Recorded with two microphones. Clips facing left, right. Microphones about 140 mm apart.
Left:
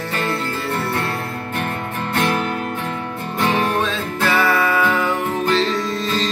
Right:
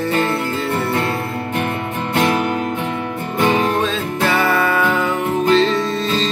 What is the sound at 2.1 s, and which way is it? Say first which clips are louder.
Music: right 3 dB; 15° right (ahead or behind).